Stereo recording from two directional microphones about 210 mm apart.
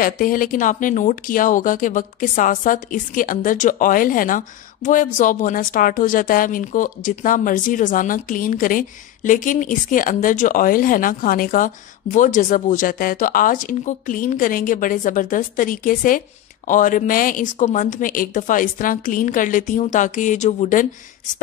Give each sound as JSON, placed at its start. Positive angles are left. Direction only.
{"t": 0.0, "sound": "speech", "side_deg": 40}